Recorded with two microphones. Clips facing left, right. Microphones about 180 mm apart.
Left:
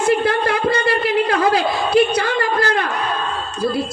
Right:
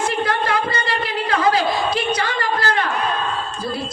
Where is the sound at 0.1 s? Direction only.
60° left (ahead or behind).